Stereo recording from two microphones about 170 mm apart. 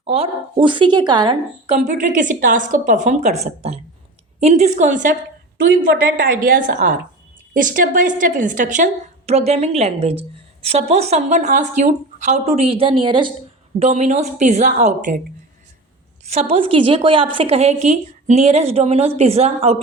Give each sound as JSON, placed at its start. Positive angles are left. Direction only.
{"t": 0.0, "sound": "speech", "side_deg": -35}
{"t": 1.6, "sound": "a woman's voice", "side_deg": -40}
{"t": 6.1, "sound": "a woman's voice", "side_deg": -55}
{"t": 16.3, "sound": "a woman's voice", "side_deg": -35}